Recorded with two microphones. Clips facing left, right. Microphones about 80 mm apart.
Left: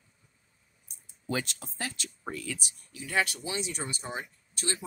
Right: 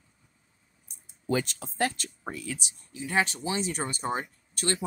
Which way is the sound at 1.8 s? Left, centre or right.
Right.